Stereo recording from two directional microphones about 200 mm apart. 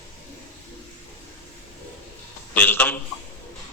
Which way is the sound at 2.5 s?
10° left (ahead or behind).